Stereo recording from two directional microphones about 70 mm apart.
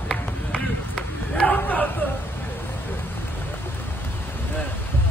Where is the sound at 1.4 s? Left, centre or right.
Left.